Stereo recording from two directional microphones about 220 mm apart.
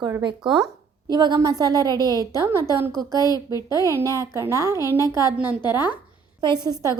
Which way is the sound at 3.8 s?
15° right (ahead or behind).